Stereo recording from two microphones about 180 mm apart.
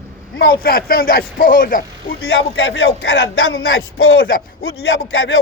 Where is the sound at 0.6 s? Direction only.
55° left (ahead or behind).